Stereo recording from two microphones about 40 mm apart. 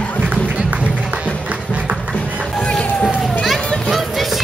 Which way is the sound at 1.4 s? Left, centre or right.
Right.